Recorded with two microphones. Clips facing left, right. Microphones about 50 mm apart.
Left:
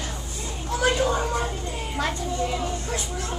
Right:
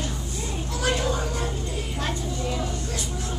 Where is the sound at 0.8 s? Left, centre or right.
Left.